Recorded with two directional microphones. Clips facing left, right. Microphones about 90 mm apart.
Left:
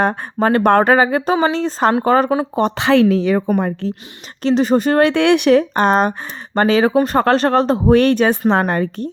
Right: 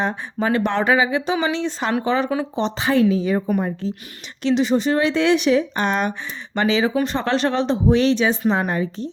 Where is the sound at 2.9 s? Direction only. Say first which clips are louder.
Left 4 dB; 75° left (ahead or behind).